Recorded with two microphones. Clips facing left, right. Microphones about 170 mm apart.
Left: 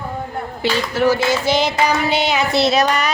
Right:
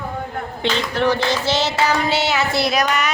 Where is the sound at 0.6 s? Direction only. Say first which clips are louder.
Left 2 dB; 10° left (ahead or behind).